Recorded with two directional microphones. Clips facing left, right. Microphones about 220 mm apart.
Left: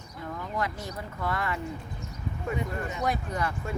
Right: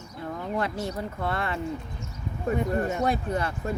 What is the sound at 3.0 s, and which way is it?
Speech, 30° right (ahead or behind).